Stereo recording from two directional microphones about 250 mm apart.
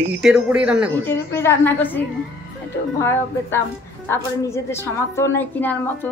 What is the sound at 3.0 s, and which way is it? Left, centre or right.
Speech, centre.